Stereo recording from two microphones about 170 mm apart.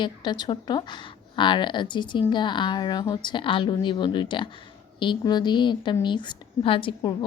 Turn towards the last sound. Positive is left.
turn(degrees=25)  # may be behind; listen again after turning